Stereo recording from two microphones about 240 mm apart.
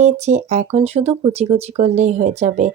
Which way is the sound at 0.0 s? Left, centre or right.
Right.